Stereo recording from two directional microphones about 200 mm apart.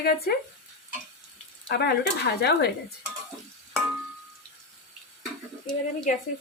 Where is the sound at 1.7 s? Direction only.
55° left (ahead or behind).